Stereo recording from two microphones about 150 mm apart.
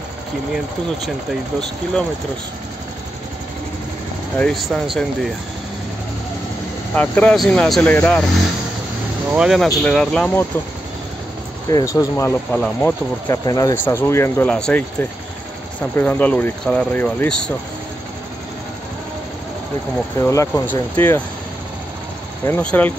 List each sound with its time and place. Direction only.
4.4 s speech: 5° left (ahead or behind)
6.9 s speech: 10° left (ahead or behind)
9.3 s speech: 5° right (ahead or behind)
11.7 s speech: 25° left (ahead or behind)
20.2 s speech: 20° left (ahead or behind)
22.5 s speech: 10° left (ahead or behind)